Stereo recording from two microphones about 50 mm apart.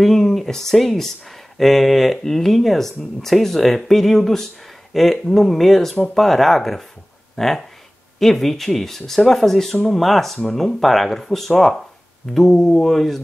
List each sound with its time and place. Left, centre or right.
0.0 s speech: centre
12.6 s mantra: centre